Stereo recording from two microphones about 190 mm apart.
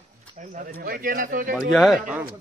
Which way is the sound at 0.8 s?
50° right (ahead or behind).